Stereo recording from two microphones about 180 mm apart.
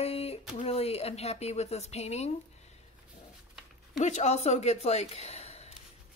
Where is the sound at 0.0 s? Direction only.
35° left (ahead or behind).